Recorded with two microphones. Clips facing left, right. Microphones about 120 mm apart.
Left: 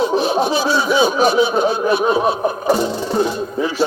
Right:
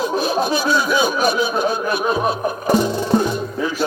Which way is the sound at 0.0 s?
25° left (ahead or behind).